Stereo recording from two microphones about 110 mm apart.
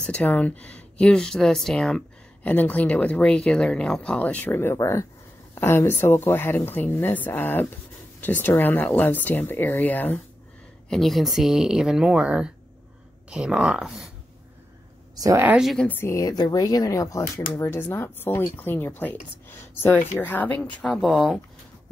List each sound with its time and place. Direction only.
0.0 s speech: 15° left (ahead or behind)
10.9 s speech: centre (ahead or behind)
15.1 s speech: 35° right (ahead or behind)
15.6 s speech: centre (ahead or behind)
15.9 s speech: 25° left (ahead or behind)
20.8 s speech: centre (ahead or behind)